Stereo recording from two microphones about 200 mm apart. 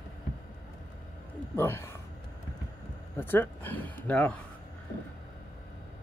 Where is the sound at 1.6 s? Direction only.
10° left (ahead or behind).